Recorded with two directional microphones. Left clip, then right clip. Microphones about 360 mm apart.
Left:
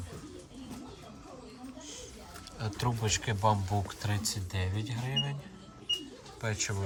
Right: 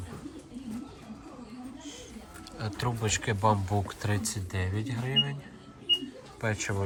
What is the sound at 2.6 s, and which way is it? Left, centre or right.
Speech, centre.